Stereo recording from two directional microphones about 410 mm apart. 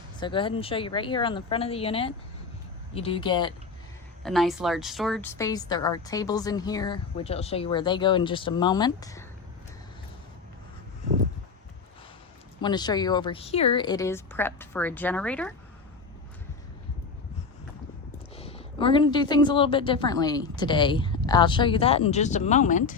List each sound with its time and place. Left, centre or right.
0.2 s a woman's voice: centre
4.2 s a woman's voice: centre
12.6 s a woman's voice: centre
18.3 s a woman's voice: centre